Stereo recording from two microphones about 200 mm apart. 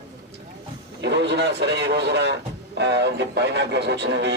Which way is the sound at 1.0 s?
60° right (ahead or behind).